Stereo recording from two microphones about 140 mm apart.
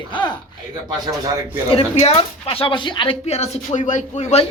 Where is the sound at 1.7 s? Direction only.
45° left (ahead or behind).